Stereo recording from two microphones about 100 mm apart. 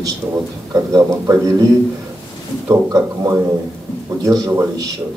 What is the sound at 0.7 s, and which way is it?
Speech, 35° right (ahead or behind).